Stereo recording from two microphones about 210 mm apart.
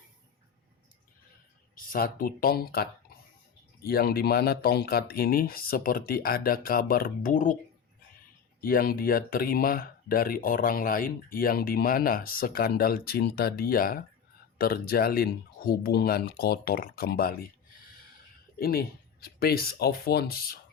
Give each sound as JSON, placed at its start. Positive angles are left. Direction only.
{"t": 1.7, "sound": "speech", "side_deg": 40}
{"t": 8.6, "sound": "speech", "side_deg": 45}
{"t": 18.6, "sound": "speech", "side_deg": 45}